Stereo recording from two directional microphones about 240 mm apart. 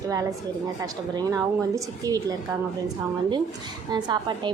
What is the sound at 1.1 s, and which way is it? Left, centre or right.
A woman's voice, centre.